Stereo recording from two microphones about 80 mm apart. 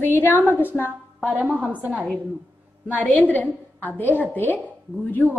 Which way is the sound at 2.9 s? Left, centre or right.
Centre.